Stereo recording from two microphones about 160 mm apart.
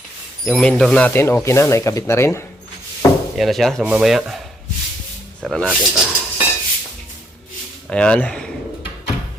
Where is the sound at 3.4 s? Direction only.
Centre (ahead or behind).